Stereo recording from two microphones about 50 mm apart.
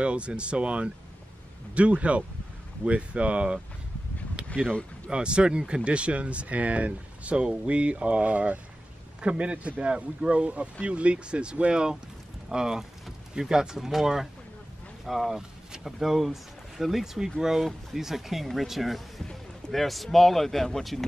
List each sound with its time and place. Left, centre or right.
0.0 s speech: right
4.6 s speech: left
5.1 s speech: centre